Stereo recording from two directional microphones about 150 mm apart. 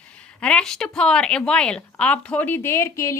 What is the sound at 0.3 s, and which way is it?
A woman's voice, 5° left (ahead or behind).